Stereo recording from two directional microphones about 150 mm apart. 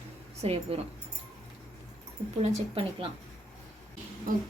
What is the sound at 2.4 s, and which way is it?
Speech, 40° right (ahead or behind).